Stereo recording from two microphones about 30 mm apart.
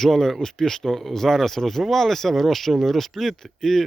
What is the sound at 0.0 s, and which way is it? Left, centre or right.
Speech, centre.